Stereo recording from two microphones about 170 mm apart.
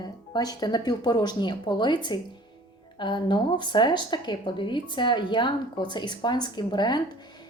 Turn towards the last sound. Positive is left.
turn(degrees=25)  # may be behind; listen again after turning